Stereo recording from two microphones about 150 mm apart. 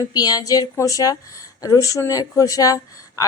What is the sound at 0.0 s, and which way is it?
Speech, 25° left (ahead or behind).